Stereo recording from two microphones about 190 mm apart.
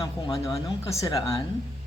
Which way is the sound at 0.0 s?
15° left (ahead or behind).